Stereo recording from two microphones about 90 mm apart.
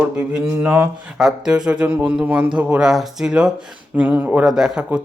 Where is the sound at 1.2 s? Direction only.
10° right (ahead or behind).